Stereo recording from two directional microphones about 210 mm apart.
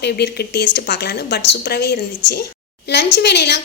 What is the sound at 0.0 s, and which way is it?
A woman's voice, 50° left (ahead or behind).